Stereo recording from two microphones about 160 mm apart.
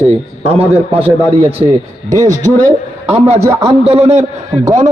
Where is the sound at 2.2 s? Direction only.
55° right (ahead or behind).